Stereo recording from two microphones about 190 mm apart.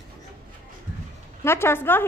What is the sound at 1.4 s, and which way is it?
Speech, 15° left (ahead or behind).